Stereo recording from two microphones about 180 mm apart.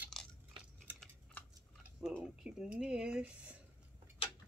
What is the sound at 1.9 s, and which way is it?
Speech, 5° right (ahead or behind).